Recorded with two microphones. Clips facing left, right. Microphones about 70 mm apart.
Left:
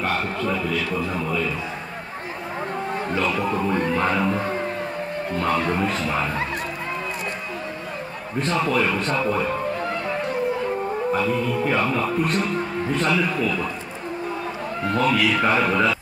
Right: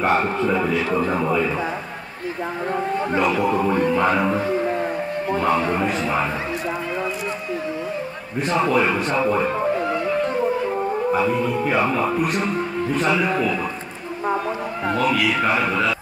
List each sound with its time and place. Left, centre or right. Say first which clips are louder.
0.0 s a man's voice: right 5 dB; right
3.2 s speech: right 4 dB; centre
8.4 s speech: right 3 dB; centre
11.1 s music: right 2 dB; centre
11.6 s speech: right 2 dB; centre
15.0 s speech: left 1 dB; centre